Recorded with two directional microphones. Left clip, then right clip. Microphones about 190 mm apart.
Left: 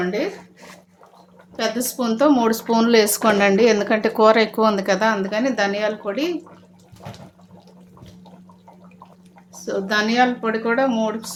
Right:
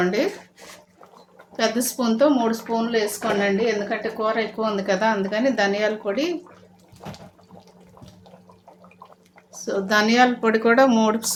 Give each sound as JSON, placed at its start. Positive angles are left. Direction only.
{"t": 0.0, "sound": "speech", "side_deg": -30}
{"t": 1.5, "sound": "speech", "side_deg": -5}
{"t": 2.1, "sound": "speech", "side_deg": 20}
{"t": 2.5, "sound": "speech", "side_deg": 50}
{"t": 9.5, "sound": "a woman's voice", "side_deg": 0}
{"t": 10.4, "sound": "speech", "side_deg": -25}